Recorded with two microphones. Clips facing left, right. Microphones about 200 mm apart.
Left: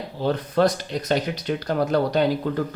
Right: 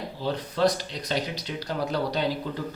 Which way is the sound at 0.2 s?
55° left (ahead or behind).